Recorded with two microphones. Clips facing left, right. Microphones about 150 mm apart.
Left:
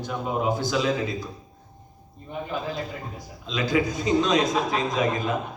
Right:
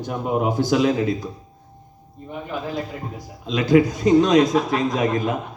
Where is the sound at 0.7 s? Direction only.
55° right (ahead or behind).